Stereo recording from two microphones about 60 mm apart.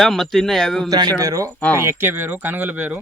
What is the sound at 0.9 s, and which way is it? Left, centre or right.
Speech, right.